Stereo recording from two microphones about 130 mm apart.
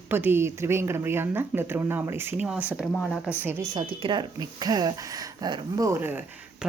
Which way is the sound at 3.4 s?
25° right (ahead or behind).